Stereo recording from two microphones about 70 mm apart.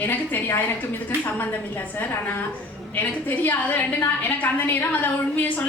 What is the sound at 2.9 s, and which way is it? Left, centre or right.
A woman's voice, left.